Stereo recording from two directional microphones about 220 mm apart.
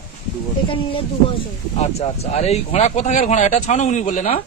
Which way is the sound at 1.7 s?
30° left (ahead or behind).